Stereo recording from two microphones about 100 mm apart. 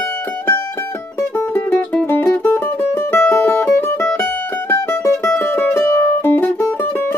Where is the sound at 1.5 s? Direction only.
20° left (ahead or behind).